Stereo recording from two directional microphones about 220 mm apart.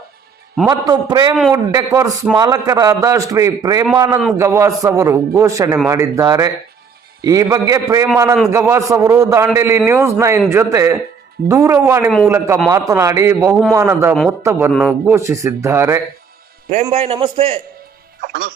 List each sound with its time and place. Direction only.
0.7 s a man's voice: 15° right (ahead or behind)
16.9 s a man's voice: 25° right (ahead or behind)